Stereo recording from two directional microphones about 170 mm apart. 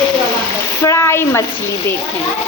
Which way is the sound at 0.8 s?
15° left (ahead or behind).